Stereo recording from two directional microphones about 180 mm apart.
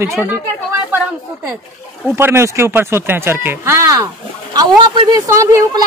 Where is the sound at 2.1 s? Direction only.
15° right (ahead or behind).